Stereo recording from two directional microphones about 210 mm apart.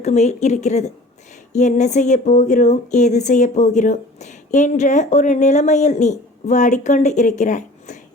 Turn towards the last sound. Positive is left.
turn(degrees=35)  # may be behind; listen again after turning